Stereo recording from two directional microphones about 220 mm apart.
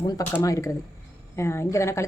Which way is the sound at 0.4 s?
15° left (ahead or behind).